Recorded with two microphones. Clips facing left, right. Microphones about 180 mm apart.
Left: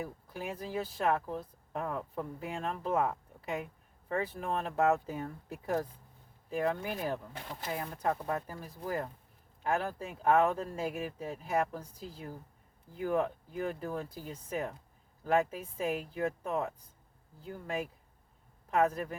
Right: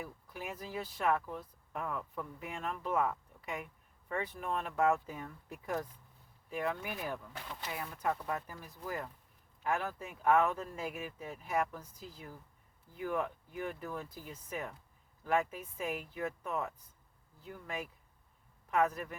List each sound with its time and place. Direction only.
0.0 s speech: 35° left (ahead or behind)